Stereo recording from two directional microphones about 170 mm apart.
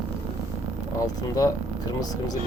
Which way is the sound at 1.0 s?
20° left (ahead or behind).